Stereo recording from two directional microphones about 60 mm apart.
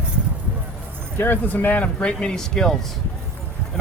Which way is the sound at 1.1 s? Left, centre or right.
Left.